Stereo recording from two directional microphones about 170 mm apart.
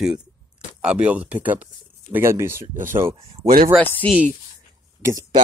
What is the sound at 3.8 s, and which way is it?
Speech, 10° left (ahead or behind).